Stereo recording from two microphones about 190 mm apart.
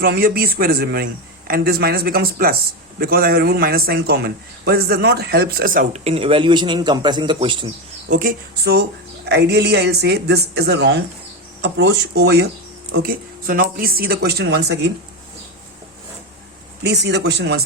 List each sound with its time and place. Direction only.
0.0 s a man's voice: 50° right (ahead or behind); by 7.7 s 25° right (ahead or behind)
8.1 s speech: 50° right (ahead or behind)
16.8 s speech: 60° right (ahead or behind)